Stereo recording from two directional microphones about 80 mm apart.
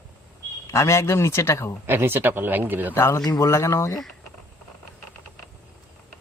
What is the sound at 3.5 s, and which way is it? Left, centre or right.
Speech, left.